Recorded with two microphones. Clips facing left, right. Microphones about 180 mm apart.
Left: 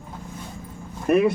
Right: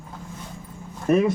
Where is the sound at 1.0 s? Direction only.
65° left (ahead or behind).